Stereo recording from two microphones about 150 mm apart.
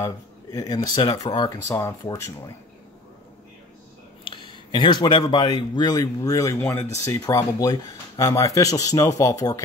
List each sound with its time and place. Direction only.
0.0 s speech: 25° left (ahead or behind)
4.3 s speech: 30° left (ahead or behind)